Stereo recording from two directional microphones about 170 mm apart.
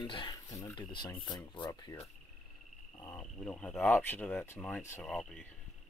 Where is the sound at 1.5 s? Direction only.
25° left (ahead or behind).